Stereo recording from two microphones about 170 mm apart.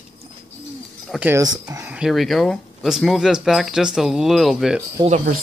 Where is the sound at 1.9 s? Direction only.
Centre (ahead or behind).